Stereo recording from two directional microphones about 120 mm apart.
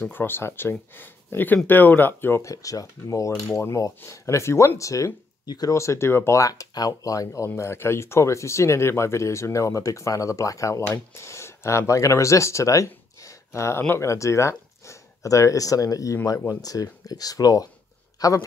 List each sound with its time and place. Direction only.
0.0 s speech: 15° left (ahead or behind)